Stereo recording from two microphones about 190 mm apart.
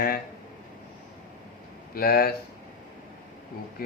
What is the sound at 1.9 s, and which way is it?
Speech, 55° left (ahead or behind).